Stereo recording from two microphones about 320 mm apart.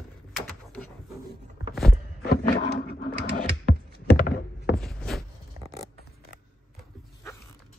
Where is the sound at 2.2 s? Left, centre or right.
Left.